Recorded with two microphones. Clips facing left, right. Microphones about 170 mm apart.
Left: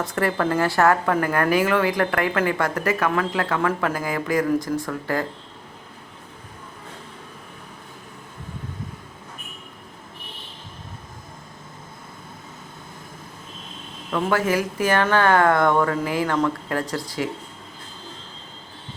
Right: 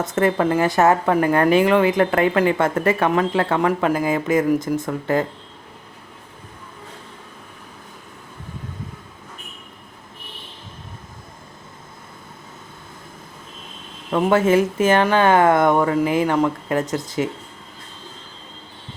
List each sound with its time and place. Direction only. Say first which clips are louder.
0.0 s speech: right 4 dB; 20° right (ahead or behind)
14.1 s speech: right 5 dB; 25° right (ahead or behind)